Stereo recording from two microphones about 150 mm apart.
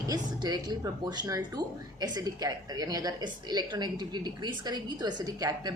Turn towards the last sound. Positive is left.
turn(degrees=-25)  # may be behind; listen again after turning